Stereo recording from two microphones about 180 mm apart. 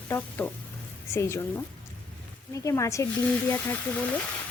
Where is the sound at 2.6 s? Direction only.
15° left (ahead or behind).